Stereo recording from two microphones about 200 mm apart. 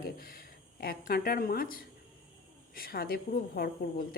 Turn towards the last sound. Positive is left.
turn(degrees=50)  # may be behind; listen again after turning